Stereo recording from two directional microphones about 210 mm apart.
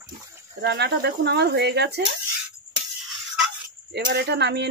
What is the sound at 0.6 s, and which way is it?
Speech, 50° right (ahead or behind).